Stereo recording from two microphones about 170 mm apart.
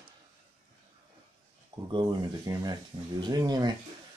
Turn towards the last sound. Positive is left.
turn(degrees=-25)  # may be behind; listen again after turning